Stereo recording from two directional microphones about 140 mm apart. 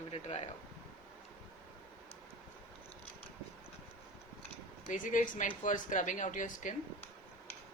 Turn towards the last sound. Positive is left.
turn(degrees=65)  # may be behind; listen again after turning